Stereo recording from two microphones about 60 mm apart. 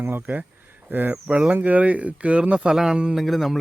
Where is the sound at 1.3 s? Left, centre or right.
Centre.